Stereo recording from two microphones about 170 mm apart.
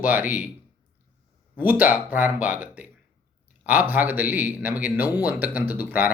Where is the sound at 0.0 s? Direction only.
10° right (ahead or behind).